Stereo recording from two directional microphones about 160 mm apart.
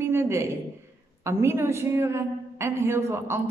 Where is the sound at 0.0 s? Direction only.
15° right (ahead or behind).